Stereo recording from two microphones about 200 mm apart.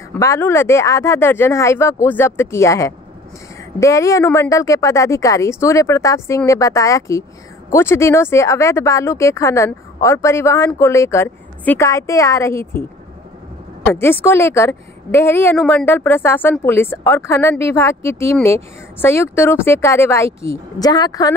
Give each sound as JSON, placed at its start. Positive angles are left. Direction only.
{"t": 0.1, "sound": "speech", "side_deg": 10}
{"t": 13.8, "sound": "a woman's voice", "side_deg": 10}